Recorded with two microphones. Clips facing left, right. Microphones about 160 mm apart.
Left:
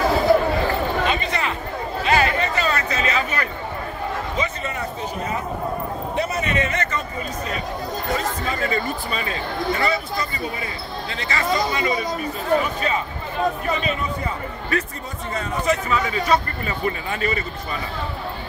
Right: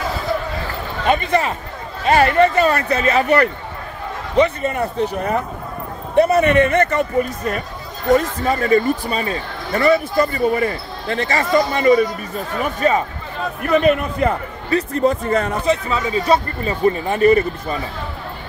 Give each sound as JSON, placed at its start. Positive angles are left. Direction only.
{"t": 1.0, "sound": "a sound", "side_deg": -55}
{"t": 2.0, "sound": "a man's voice", "side_deg": -55}
{"t": 8.1, "sound": "speech", "side_deg": -45}
{"t": 13.7, "sound": "a man's voice", "side_deg": -60}
{"t": 15.6, "sound": "a man's voice", "side_deg": -30}
{"t": 17.3, "sound": "speech", "side_deg": -50}